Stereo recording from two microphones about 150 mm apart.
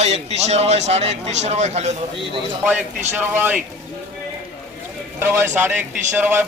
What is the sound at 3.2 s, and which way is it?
Speech, 15° right (ahead or behind).